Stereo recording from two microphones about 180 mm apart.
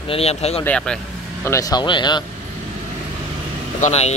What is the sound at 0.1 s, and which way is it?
Speech, 35° left (ahead or behind).